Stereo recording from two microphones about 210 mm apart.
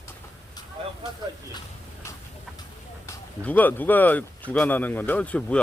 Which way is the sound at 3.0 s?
10° left (ahead or behind).